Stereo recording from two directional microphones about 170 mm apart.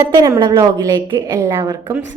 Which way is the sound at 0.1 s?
20° right (ahead or behind).